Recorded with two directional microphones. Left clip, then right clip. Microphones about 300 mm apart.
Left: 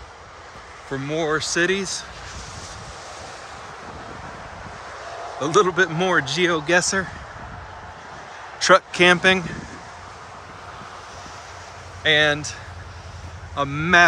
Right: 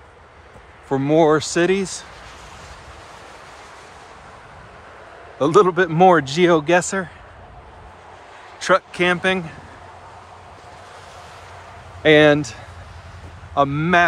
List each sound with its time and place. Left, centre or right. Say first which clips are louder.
0.9 s speech: right 8 dB; centre
5.4 s speech: right 3 dB; centre
8.5 s speech: left 2 dB; centre
12.0 s speech: right 5 dB; centre
13.6 s speech: right 1 dB; centre